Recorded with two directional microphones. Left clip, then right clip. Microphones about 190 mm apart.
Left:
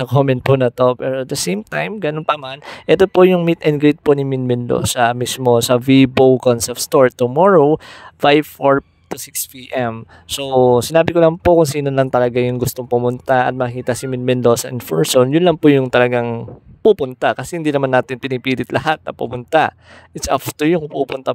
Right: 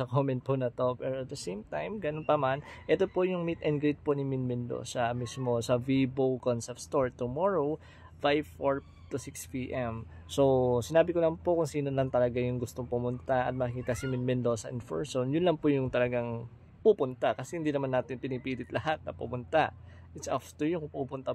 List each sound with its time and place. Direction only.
0.0 s speech: 60° left (ahead or behind)